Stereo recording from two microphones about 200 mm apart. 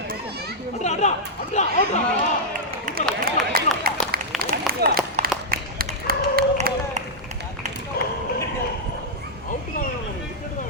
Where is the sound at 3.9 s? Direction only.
45° right (ahead or behind).